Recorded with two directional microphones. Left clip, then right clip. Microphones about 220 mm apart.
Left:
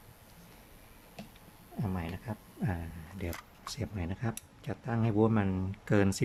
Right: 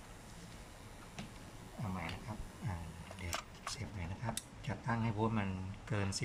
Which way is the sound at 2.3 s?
40° left (ahead or behind).